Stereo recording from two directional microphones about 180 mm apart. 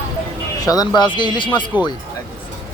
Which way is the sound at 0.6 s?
20° left (ahead or behind).